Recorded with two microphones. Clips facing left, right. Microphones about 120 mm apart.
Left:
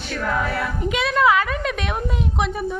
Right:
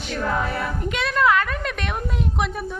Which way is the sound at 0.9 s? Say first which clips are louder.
Left 2 dB; 5° left (ahead or behind).